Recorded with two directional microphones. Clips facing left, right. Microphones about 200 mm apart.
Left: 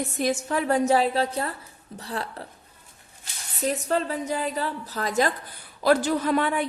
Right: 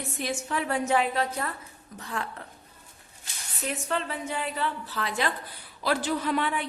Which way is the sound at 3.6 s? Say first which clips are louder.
Left 6 dB; 40° left (ahead or behind).